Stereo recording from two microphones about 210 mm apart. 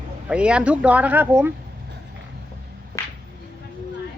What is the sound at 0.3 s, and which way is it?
Speech, 5° right (ahead or behind).